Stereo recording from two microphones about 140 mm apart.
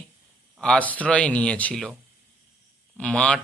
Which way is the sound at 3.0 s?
10° left (ahead or behind).